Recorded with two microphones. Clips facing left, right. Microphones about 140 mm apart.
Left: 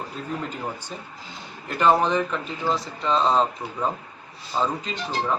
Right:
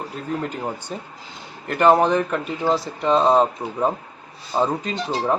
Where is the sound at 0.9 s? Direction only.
45° right (ahead or behind).